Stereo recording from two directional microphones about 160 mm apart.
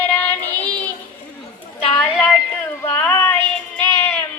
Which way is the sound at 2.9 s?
10° left (ahead or behind).